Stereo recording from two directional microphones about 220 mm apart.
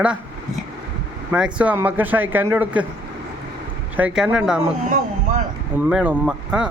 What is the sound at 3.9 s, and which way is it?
Speech, 5° right (ahead or behind).